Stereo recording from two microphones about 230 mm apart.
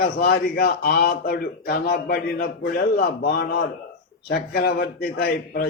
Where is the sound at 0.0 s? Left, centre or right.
Left.